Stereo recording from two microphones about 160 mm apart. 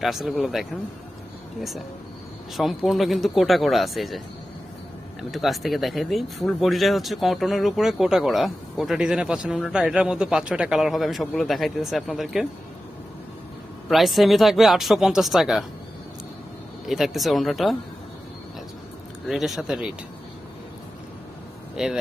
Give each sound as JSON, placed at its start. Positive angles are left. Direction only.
{"t": 0.0, "sound": "speech", "side_deg": 0}
{"t": 2.6, "sound": "speech", "side_deg": 0}
{"t": 5.3, "sound": "speech", "side_deg": 0}
{"t": 13.9, "sound": "speech", "side_deg": 0}
{"t": 16.9, "sound": "speech", "side_deg": 0}
{"t": 19.3, "sound": "speech", "side_deg": 0}
{"t": 21.8, "sound": "speech", "side_deg": -5}